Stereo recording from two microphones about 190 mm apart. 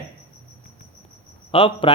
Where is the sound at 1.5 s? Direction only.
25° left (ahead or behind).